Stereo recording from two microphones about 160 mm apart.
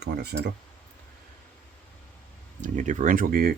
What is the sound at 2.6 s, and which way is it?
Speech, 50° right (ahead or behind).